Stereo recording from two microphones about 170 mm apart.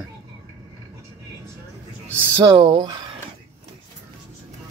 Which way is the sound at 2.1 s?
20° right (ahead or behind).